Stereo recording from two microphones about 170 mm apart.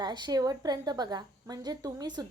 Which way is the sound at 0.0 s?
25° right (ahead or behind).